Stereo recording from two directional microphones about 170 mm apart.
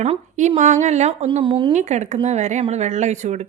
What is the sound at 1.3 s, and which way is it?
Speech, 30° right (ahead or behind).